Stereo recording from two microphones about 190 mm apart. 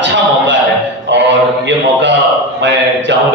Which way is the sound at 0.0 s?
70° right (ahead or behind).